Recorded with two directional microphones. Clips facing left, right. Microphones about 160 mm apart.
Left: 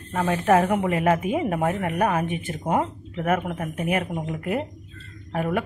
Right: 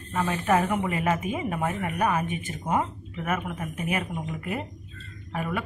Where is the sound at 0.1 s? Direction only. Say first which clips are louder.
Left 4 dB; 55° left (ahead or behind).